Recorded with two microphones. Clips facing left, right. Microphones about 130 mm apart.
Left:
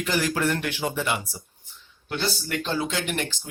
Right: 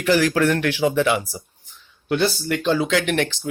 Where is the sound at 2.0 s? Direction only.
65° right (ahead or behind); by 3.5 s 85° right.